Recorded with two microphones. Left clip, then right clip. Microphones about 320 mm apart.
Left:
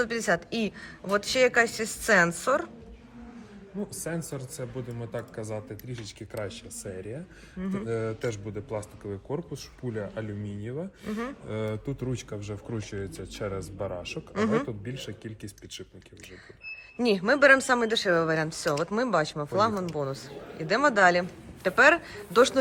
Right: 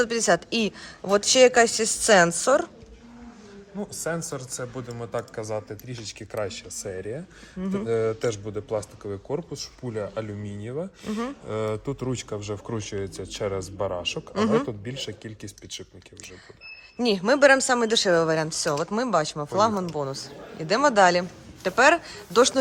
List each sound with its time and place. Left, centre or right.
0.0 s speech: centre
4.0 s a man's voice: right
7.6 s speech: centre
7.9 s a man's voice: right
11.0 s speech: centre
11.4 s a man's voice: right
14.3 s speech: centre
14.8 s a man's voice: right
17.0 s speech: centre